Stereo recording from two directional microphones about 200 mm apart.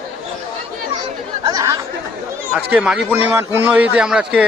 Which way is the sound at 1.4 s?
20° right (ahead or behind).